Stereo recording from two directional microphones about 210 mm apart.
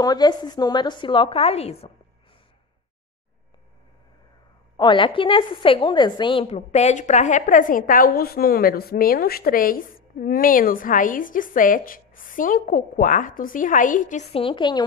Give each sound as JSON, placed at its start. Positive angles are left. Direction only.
{"t": 0.0, "sound": "a woman's voice", "side_deg": 20}
{"t": 4.7, "sound": "a woman's voice", "side_deg": 25}